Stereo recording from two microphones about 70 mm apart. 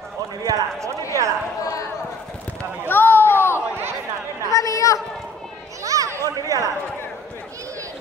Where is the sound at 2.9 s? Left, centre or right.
Left.